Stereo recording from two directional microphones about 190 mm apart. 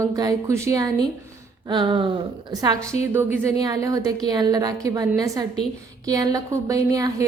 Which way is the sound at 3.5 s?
20° right (ahead or behind).